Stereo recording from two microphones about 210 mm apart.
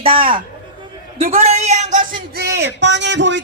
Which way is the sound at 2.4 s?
55° right (ahead or behind).